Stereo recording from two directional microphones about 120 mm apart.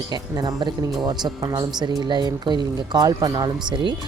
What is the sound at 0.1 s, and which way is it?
Speech, 35° right (ahead or behind).